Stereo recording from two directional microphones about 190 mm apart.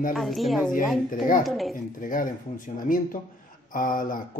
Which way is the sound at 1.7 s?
45° left (ahead or behind).